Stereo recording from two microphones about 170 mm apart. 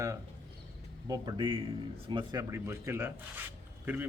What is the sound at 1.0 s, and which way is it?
A man's voice, 25° right (ahead or behind).